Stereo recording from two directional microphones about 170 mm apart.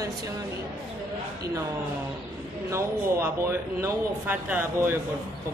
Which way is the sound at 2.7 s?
15° right (ahead or behind).